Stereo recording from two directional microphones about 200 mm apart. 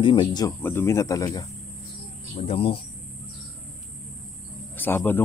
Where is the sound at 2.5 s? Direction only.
25° left (ahead or behind).